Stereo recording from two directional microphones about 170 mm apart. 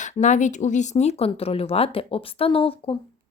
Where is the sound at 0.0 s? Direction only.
45° left (ahead or behind).